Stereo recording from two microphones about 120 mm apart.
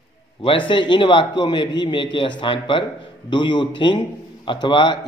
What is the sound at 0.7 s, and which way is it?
A man's voice, 40° left (ahead or behind).